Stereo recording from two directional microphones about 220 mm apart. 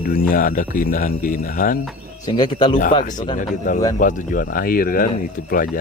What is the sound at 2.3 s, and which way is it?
Speech, 20° left (ahead or behind).